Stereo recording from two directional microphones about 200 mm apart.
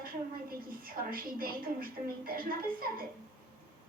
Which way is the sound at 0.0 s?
45° right (ahead or behind).